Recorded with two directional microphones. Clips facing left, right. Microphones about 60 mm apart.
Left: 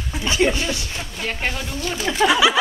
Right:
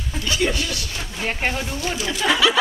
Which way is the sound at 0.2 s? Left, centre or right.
Left.